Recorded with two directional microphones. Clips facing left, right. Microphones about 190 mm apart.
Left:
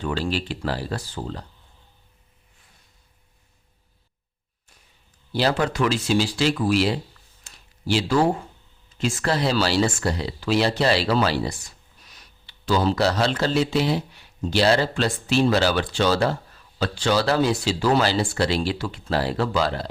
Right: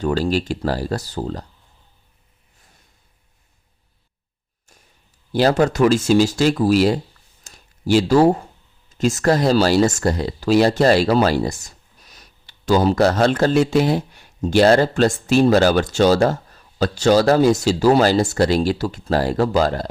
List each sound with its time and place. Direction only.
0.0 s speech: 40° right (ahead or behind)
5.3 s speech: 45° right (ahead or behind)
7.4 s a sound: 45° right (ahead or behind)
8.9 s speech: 40° right (ahead or behind)